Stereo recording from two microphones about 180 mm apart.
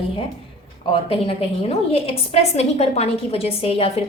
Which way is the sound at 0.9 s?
30° left (ahead or behind).